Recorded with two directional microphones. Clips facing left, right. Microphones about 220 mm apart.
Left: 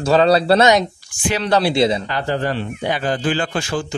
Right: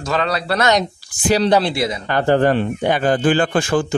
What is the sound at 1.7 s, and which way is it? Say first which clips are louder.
Speech: left 5 dB; 25° left (ahead or behind).